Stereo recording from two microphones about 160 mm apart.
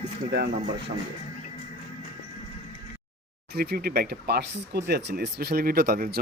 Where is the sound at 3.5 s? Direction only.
70° right (ahead or behind).